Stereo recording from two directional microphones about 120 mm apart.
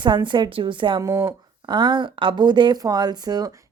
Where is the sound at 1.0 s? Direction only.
30° right (ahead or behind).